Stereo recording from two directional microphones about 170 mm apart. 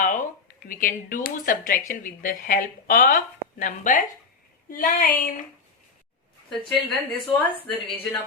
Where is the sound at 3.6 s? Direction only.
50° left (ahead or behind).